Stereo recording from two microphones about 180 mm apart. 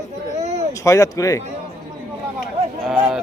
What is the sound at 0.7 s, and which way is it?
Speech, 15° left (ahead or behind).